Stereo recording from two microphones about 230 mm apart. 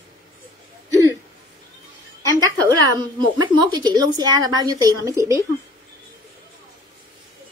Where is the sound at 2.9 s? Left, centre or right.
Centre.